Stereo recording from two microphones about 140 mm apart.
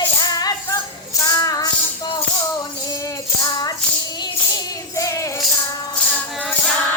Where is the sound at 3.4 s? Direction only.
25° left (ahead or behind).